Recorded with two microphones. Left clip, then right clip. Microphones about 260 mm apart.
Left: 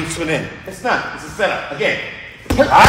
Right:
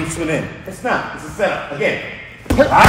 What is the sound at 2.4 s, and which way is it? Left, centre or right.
Speech, centre.